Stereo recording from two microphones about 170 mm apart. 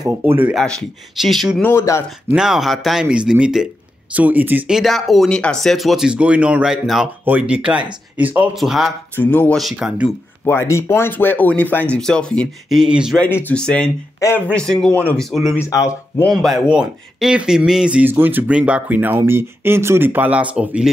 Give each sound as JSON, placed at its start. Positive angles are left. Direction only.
{"t": 0.0, "sound": "speech", "side_deg": -10}
{"t": 0.6, "sound": "speech", "side_deg": 0}
{"t": 1.7, "sound": "speech", "side_deg": 15}
{"t": 2.3, "sound": "speech", "side_deg": 0}
{"t": 9.1, "sound": "speech", "side_deg": 10}
{"t": 9.6, "sound": "speech", "side_deg": 0}
{"t": 10.4, "sound": "speech", "side_deg": 15}
{"t": 13.2, "sound": "speech", "side_deg": 10}